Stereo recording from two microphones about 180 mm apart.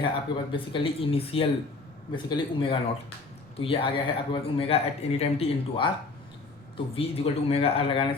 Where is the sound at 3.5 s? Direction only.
30° left (ahead or behind).